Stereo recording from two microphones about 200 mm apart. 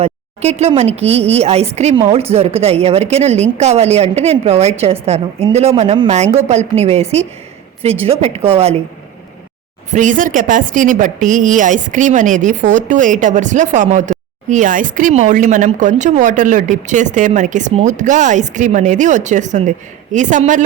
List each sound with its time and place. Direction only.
0.6 s a woman's voice: 30° right (ahead or behind)
9.9 s speech: 40° right (ahead or behind)